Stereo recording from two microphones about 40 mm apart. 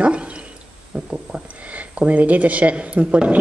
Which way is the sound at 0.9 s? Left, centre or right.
Right.